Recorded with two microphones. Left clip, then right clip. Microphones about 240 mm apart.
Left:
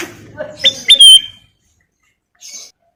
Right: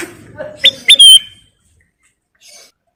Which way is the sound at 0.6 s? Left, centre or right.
Centre.